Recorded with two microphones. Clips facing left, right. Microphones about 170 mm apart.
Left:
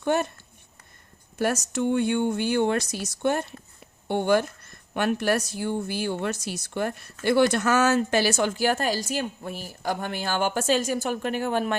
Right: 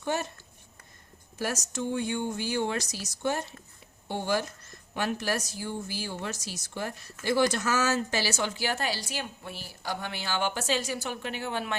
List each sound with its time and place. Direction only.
0.0 s speech: 60° left (ahead or behind)
1.4 s a woman's voice: 60° left (ahead or behind)